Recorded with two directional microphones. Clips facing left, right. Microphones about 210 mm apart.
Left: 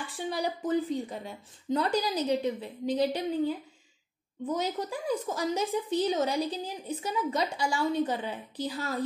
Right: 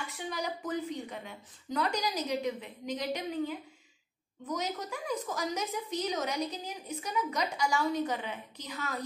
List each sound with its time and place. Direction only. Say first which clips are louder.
0.1 s a woman's voice: left 8 dB; 30° left (ahead or behind)